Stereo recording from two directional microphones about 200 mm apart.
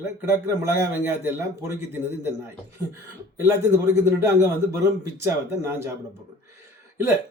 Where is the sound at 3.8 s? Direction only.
15° right (ahead or behind).